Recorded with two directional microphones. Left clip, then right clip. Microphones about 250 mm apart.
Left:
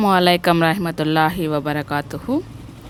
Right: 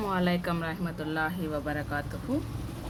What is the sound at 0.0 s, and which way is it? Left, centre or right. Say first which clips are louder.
A woman's voice: left 15 dB; left.